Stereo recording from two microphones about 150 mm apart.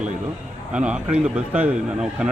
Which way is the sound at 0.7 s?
5° right (ahead or behind).